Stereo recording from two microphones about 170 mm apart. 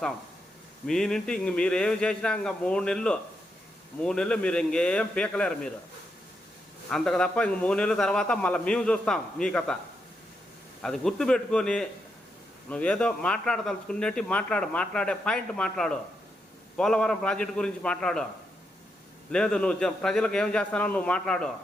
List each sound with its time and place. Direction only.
0.9 s a man's voice: 5° left (ahead or behind)
6.9 s a man's voice: 5° left (ahead or behind)
10.8 s a man's voice: centre (ahead or behind)
19.3 s a man's voice: 5° left (ahead or behind)